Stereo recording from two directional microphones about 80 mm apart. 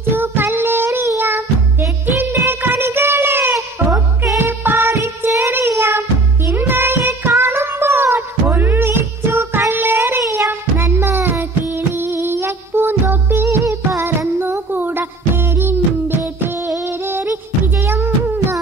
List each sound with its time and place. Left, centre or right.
0.1 s music: right
3.9 s music: right